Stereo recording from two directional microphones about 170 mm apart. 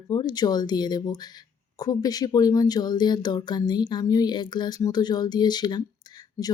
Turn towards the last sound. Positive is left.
turn(degrees=25)  # may be behind; listen again after turning